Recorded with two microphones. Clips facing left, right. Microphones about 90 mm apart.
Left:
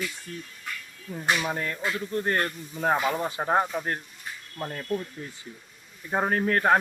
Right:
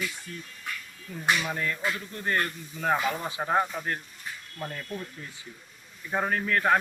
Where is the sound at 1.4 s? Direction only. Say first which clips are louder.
Left 1 dB; 30° left (ahead or behind).